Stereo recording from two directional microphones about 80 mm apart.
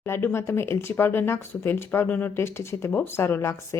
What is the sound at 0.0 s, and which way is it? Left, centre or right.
Speech, left.